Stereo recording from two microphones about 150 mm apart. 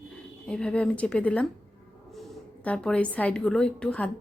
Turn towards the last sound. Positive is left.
turn(degrees=10)  # may be behind; listen again after turning